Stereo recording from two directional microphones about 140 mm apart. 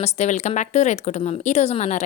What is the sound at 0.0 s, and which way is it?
Speech, 50° left (ahead or behind).